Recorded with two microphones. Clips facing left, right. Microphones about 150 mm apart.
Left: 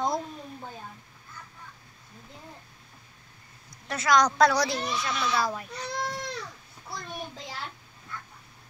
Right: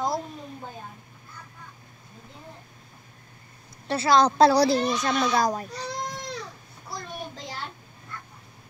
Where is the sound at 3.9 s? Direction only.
30° right (ahead or behind).